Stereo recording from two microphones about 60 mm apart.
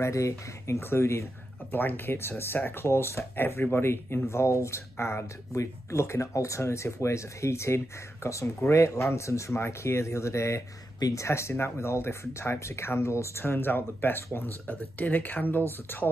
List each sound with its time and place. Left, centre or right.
0.0 s speech: left
1.7 s speech: left
5.2 s speech: left
11.0 s speech: left
11.2 s speech: left